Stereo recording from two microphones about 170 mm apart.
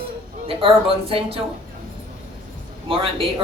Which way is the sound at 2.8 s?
30° right (ahead or behind).